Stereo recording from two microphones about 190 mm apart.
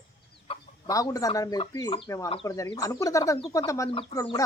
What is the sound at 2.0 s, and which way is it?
Speech, 15° left (ahead or behind).